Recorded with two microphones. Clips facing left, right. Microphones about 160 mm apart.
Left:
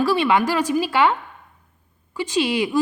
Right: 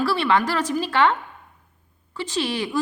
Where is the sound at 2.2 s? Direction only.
15° left (ahead or behind).